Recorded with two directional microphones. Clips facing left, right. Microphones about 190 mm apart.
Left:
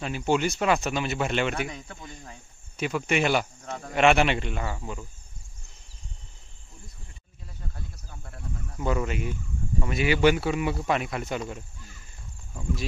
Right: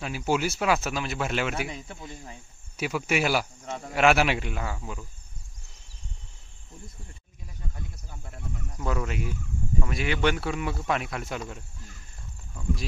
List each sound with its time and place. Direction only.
0.0 s speech: 5° right (ahead or behind)
2.8 s speech: 5° right (ahead or behind)
3.6 s a man's voice: 20° right (ahead or behind)
3.9 s speech: 5° right (ahead or behind)
7.7 s snake: 15° right (ahead or behind)
8.7 s speech: centre (ahead or behind)